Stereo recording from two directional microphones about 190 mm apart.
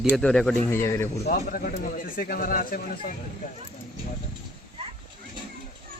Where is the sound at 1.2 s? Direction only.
50° left (ahead or behind).